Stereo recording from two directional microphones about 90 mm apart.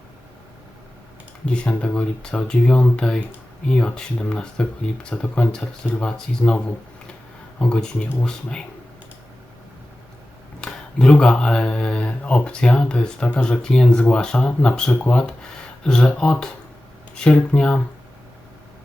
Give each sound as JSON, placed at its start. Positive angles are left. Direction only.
{"t": 1.5, "sound": "speech", "side_deg": 15}
{"t": 7.6, "sound": "speech", "side_deg": 10}
{"t": 10.6, "sound": "speech", "side_deg": 10}